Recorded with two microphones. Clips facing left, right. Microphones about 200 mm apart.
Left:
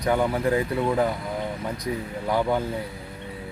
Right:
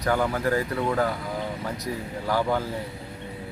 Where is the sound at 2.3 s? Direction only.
20° left (ahead or behind).